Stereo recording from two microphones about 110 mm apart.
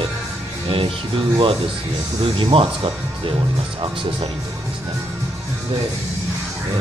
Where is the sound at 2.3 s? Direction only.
50° right (ahead or behind).